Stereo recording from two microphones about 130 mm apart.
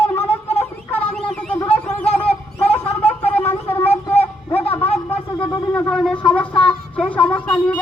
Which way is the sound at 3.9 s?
50° left (ahead or behind).